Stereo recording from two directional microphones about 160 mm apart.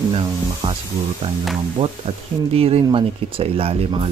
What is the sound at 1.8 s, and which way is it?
Speech, 40° right (ahead or behind).